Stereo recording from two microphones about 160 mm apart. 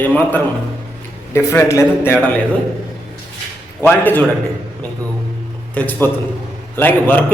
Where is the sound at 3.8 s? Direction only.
10° left (ahead or behind).